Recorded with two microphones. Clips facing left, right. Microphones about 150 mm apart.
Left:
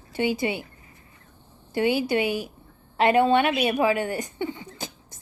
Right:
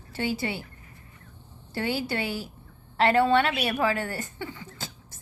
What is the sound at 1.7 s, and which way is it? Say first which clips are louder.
A woman's voice: left 6 dB; 15° left (ahead or behind).